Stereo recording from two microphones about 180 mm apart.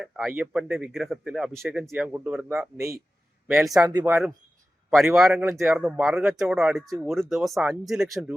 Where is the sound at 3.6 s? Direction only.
Centre (ahead or behind).